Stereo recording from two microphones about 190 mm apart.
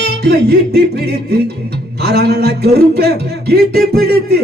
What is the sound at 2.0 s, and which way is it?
Speech, 60° right (ahead or behind).